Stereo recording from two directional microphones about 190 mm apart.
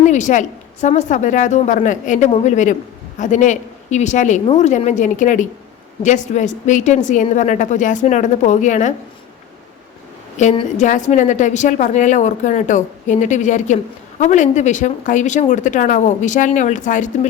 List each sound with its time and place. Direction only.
0.0 s a woman's voice: 40° left (ahead or behind)
10.3 s a woman's voice: 35° left (ahead or behind)